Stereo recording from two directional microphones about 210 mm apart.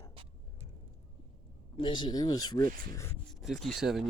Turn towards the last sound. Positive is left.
turn(degrees=0)  # may be behind; listen again after turning